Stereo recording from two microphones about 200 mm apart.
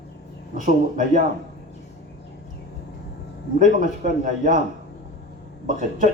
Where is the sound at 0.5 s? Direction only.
40° right (ahead or behind).